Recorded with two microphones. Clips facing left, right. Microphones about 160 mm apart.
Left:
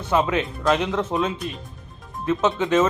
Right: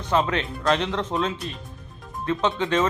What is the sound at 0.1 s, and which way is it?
Speech, 10° left (ahead or behind).